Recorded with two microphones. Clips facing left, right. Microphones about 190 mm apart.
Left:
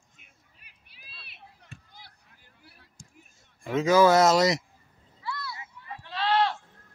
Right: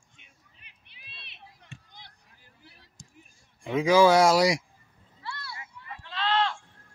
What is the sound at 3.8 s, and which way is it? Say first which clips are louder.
Speech: even; 10° right (ahead or behind).